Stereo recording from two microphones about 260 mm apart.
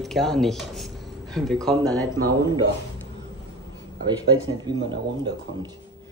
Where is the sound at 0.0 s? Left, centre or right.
Centre.